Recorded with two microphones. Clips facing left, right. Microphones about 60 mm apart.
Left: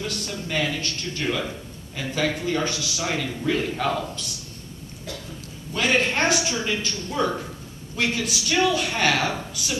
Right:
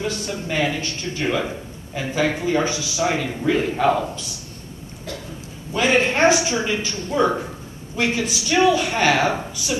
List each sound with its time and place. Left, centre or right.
0.0 s a man's voice: centre
5.7 s a woman's voice: centre